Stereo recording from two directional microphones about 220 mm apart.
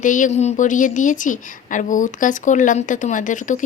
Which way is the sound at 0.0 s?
35° left (ahead or behind).